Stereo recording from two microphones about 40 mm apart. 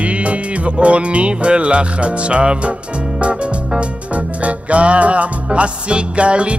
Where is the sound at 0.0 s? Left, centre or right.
Right.